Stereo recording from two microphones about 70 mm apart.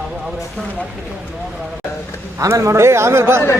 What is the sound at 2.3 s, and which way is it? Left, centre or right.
A man's voice, right.